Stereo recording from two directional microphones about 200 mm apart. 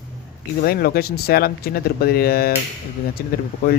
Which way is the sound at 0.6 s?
50° left (ahead or behind).